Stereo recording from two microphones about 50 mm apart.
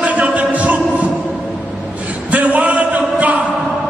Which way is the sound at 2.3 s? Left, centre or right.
Right.